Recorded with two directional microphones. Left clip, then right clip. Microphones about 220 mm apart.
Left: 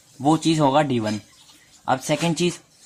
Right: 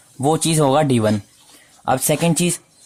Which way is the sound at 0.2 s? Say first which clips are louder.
Right 2 dB; 45° right (ahead or behind).